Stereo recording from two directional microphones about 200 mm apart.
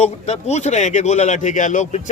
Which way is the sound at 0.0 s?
35° left (ahead or behind).